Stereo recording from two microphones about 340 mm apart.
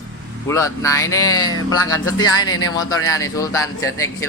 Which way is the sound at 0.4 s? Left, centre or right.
Centre.